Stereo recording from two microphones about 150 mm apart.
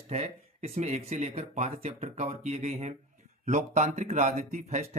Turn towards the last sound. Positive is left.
turn(degrees=-50)  # may be behind; listen again after turning